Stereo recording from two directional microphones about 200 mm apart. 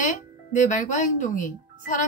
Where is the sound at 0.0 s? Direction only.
40° left (ahead or behind).